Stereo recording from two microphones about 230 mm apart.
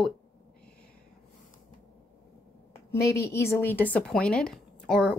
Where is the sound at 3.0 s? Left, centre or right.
Left.